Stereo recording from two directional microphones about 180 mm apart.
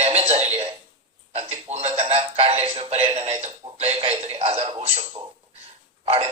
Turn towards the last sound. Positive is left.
turn(degrees=-30)  # may be behind; listen again after turning